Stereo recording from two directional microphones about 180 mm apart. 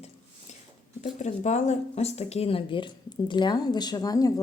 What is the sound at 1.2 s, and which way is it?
Speech, 40° left (ahead or behind).